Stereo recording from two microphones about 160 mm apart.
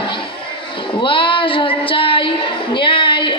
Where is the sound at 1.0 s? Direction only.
30° left (ahead or behind).